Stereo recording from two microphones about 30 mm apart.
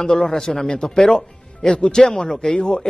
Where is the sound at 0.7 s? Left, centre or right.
Left.